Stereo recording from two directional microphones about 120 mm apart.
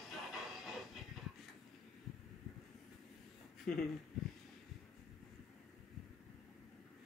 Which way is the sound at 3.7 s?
5° left (ahead or behind).